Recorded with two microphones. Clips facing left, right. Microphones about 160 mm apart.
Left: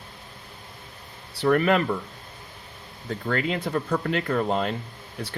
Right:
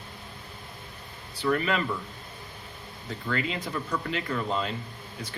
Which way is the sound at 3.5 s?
50° left (ahead or behind).